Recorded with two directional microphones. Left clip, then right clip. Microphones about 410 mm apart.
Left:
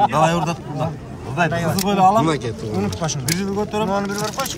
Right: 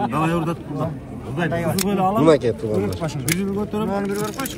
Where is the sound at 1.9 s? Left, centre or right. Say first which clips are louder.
Left 7 dB; centre.